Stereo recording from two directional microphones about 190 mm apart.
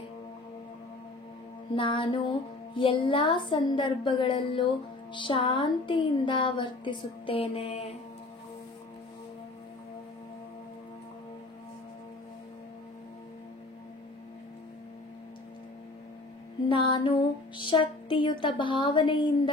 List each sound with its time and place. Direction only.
1.8 s speech: 25° left (ahead or behind)
16.6 s speech: 25° left (ahead or behind)